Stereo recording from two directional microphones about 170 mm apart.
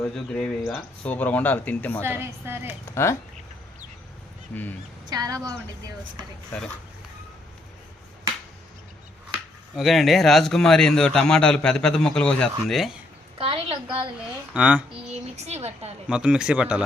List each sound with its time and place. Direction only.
0.0 s a man's voice: 5° left (ahead or behind)
2.0 s a woman's voice: 10° right (ahead or behind)
2.9 s speech: 15° left (ahead or behind)
5.0 s a woman's voice: 20° right (ahead or behind)
9.7 s a man's voice: centre (ahead or behind)
13.4 s a woman's voice: 30° right (ahead or behind)
14.5 s a woman's voice: 10° right (ahead or behind)
15.4 s a woman's voice: 40° right (ahead or behind)
16.0 s a man's voice: 5° right (ahead or behind)